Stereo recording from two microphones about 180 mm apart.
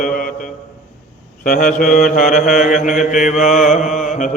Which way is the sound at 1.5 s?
50° left (ahead or behind).